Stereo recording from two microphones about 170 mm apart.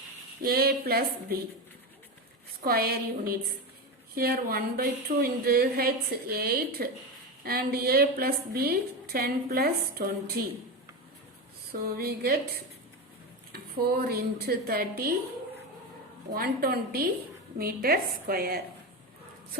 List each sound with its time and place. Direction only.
0.4 s a woman's voice: 65° right (ahead or behind)
2.6 s a woman's voice: 65° right (ahead or behind)
11.7 s a woman's voice: 60° right (ahead or behind)
16.3 s a woman's voice: 60° right (ahead or behind)